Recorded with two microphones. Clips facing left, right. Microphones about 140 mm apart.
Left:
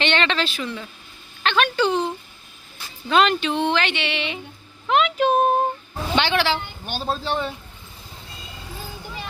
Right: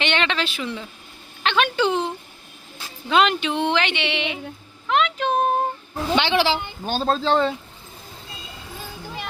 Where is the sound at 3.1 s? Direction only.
15° right (ahead or behind).